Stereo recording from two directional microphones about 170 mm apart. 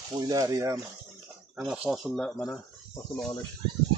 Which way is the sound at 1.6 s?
Centre (ahead or behind).